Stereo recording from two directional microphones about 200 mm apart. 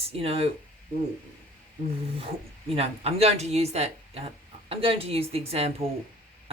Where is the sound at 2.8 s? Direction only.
30° right (ahead or behind).